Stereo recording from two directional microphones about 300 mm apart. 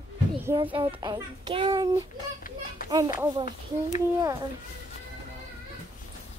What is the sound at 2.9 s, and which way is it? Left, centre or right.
Speech, centre.